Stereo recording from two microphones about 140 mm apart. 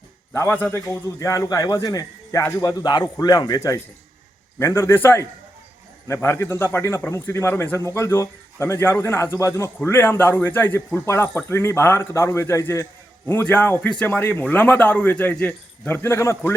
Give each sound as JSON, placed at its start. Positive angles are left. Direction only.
{"t": 0.3, "sound": "a man's voice", "side_deg": 15}